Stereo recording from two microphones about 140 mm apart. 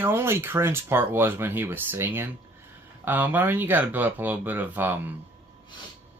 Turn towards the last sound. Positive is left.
turn(degrees=-15)  # may be behind; listen again after turning